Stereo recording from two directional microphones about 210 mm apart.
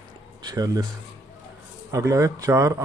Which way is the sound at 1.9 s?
15° right (ahead or behind).